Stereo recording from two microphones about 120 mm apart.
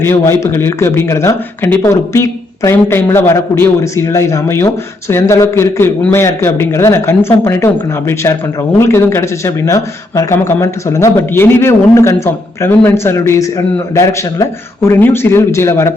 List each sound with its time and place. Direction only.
0.0 s a man's voice: 20° left (ahead or behind)